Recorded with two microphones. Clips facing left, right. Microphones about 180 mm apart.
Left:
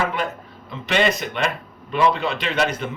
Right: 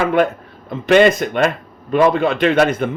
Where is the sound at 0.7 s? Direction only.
50° right (ahead or behind).